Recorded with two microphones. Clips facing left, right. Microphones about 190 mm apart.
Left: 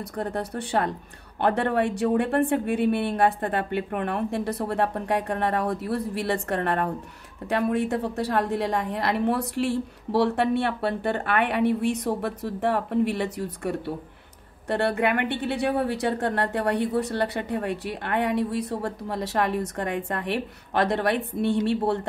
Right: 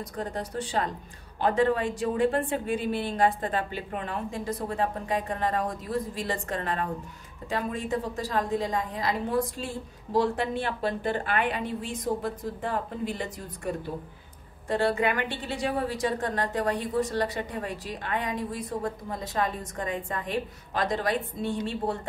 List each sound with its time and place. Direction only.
0.0 s a woman's voice: 65° left (ahead or behind)